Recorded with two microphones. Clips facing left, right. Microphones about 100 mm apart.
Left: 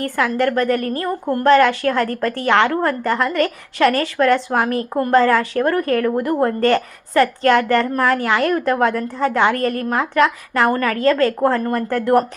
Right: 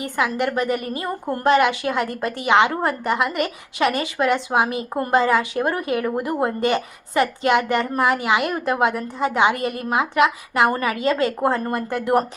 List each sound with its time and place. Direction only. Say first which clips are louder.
0.2 s a woman's voice: left 3 dB; 15° right (ahead or behind)